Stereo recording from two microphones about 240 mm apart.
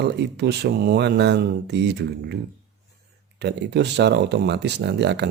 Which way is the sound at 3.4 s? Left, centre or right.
Right.